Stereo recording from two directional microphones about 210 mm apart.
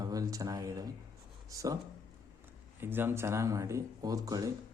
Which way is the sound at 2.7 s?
10° right (ahead or behind).